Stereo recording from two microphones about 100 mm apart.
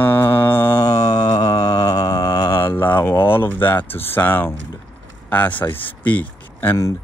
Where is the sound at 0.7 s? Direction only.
35° left (ahead or behind).